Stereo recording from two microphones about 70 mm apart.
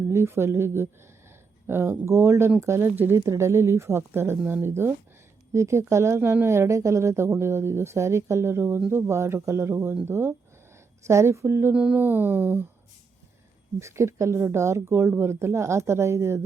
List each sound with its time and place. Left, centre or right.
0.1 s speech: right
2.9 s speech: right
3.2 s speech: right
11.7 s speech: centre
13.7 s speech: right